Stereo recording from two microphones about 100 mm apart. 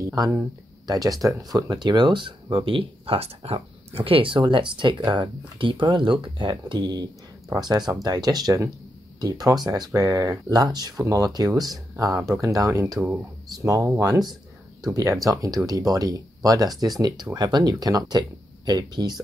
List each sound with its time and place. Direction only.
0.0 s speech: 35° right (ahead or behind)
7.4 s speech: 40° right (ahead or behind)